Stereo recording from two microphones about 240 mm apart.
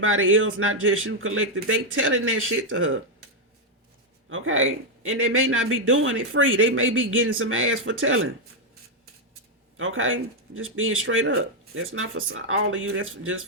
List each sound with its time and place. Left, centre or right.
0.0 s a man's voice: right
4.3 s a man's voice: right
9.7 s a man's voice: right